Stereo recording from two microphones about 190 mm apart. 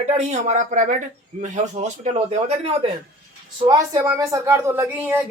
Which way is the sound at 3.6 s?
20° right (ahead or behind).